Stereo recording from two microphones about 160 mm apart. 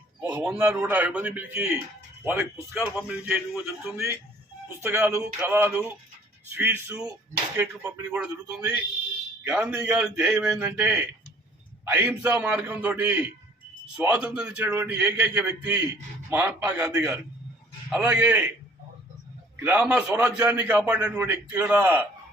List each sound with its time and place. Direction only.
0.2 s a man's voice: 10° right (ahead or behind)
19.5 s a man's voice: 10° right (ahead or behind)